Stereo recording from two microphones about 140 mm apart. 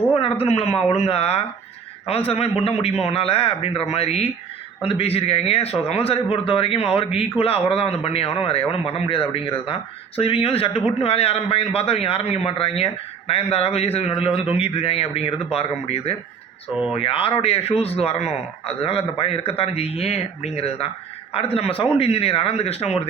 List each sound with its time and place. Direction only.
0.1 s a man's voice: 45° left (ahead or behind)